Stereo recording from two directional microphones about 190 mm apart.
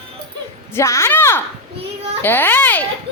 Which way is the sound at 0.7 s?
15° left (ahead or behind).